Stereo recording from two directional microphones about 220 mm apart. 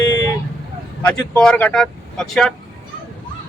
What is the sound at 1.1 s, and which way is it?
Speech, 5° left (ahead or behind).